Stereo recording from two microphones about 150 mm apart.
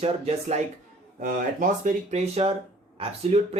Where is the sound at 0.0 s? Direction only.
45° right (ahead or behind).